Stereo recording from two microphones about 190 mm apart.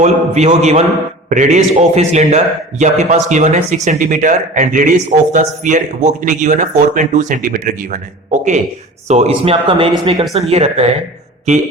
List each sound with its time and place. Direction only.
0.0 s speech: 35° right (ahead or behind)